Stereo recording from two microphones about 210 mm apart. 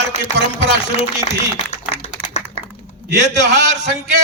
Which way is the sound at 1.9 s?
30° left (ahead or behind).